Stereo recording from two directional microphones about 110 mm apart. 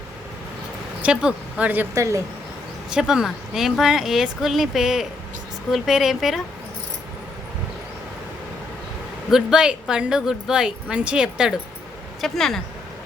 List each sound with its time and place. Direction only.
1.0 s speech: 10° right (ahead or behind)
2.0 s speech: 30° right (ahead or behind)
2.9 s speech: 5° right (ahead or behind)
9.3 s speech: 5° right (ahead or behind)
12.2 s speech: 5° left (ahead or behind)